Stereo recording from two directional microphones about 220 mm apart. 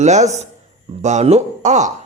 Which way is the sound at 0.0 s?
30° right (ahead or behind).